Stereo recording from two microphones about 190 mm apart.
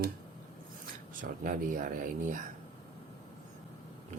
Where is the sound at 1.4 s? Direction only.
45° right (ahead or behind).